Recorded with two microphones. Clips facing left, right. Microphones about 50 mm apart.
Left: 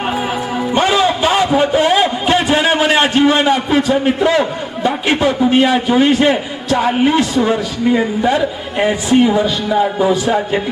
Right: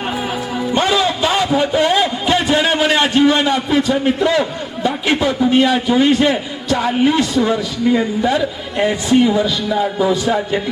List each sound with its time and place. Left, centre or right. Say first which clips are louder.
0.0 s music: left 3 dB; centre
0.8 s a sound: left 3 dB; centre
3.1 s a man's voice: left 1 dB; centre